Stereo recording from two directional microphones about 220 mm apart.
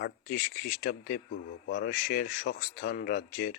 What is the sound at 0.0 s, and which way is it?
Speech, 40° left (ahead or behind).